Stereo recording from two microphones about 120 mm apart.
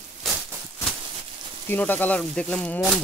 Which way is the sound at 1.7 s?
15° left (ahead or behind).